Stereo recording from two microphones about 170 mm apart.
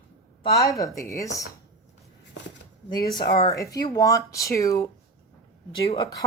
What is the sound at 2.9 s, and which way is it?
Speech, 25° left (ahead or behind).